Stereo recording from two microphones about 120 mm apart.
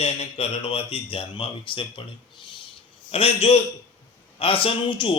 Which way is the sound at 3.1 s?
55° left (ahead or behind).